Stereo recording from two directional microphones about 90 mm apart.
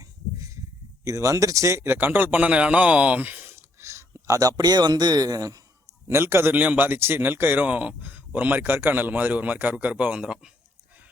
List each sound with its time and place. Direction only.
0.0 s a sound: 35° right (ahead or behind)
1.0 s speech: 35° right (ahead or behind)
6.1 s speech: 30° right (ahead or behind); by 10.5 s 10° right (ahead or behind)